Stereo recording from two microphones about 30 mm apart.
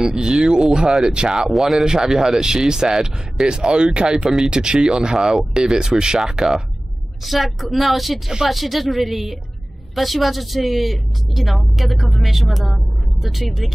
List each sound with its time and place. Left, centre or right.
0.0 s speech: right
1.5 s speech: centre
1.9 s speech: centre
7.2 s speech: centre